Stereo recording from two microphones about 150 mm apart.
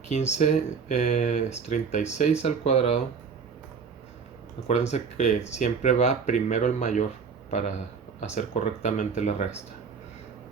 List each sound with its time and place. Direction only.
0.1 s speech: 45° left (ahead or behind)
4.7 s speech: 45° left (ahead or behind)
8.2 s speech: 55° left (ahead or behind)